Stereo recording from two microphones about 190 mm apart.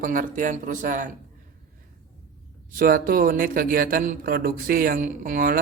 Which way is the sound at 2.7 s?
50° right (ahead or behind).